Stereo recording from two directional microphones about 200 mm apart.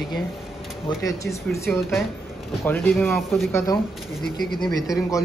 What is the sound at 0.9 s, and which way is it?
A man's voice, 15° left (ahead or behind).